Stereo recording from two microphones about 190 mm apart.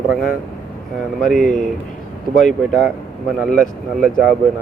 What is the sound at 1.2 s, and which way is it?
Speech, centre (ahead or behind).